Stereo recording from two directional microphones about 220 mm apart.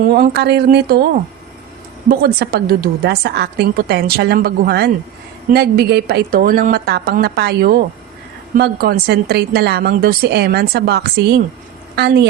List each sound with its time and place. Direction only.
0.0 s a woman's voice: 45° right (ahead or behind)
2.0 s a woman's voice: 45° right (ahead or behind)